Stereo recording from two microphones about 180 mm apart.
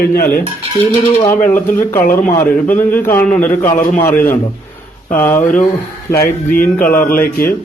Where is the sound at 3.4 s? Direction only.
45° left (ahead or behind).